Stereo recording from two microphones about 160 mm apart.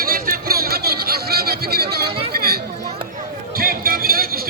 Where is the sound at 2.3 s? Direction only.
75° right (ahead or behind).